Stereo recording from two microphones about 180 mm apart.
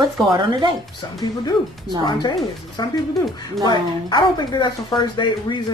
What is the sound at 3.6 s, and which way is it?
Speech, 25° left (ahead or behind).